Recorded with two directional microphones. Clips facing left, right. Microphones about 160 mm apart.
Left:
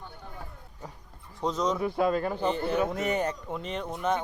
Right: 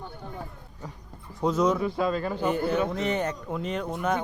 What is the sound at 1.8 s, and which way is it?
Speech, 55° left (ahead or behind).